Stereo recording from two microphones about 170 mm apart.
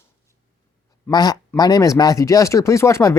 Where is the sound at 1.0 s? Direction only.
20° left (ahead or behind).